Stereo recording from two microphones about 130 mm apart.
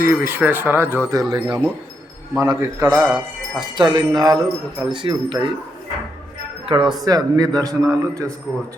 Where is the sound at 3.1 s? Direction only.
35° right (ahead or behind).